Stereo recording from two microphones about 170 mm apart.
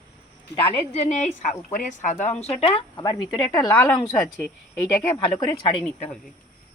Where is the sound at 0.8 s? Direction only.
40° left (ahead or behind); by 4.0 s 20° left (ahead or behind).